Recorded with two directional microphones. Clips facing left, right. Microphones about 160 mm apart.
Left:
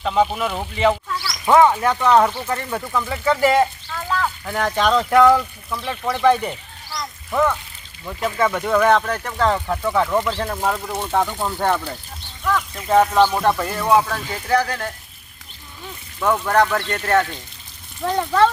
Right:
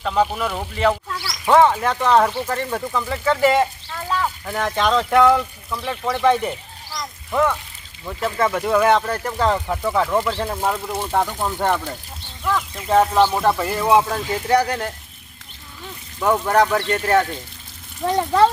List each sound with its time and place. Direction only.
0.0 s speech: centre (ahead or behind)
12.9 s speech: centre (ahead or behind)
16.2 s speech: 10° right (ahead or behind)